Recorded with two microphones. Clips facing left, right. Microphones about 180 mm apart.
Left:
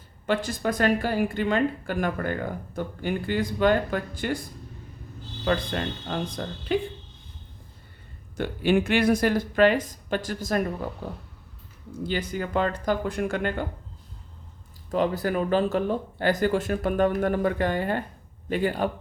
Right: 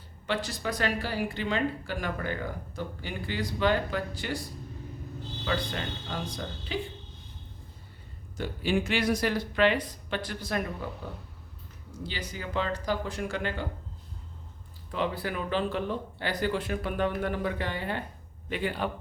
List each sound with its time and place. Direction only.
0.3 s speech: 50° left (ahead or behind)
5.5 s speech: 50° left (ahead or behind)
8.4 s speech: 60° left (ahead or behind); by 11.2 s 40° left (ahead or behind)
12.0 s speech: 50° left (ahead or behind)
14.8 s speech: 45° left (ahead or behind)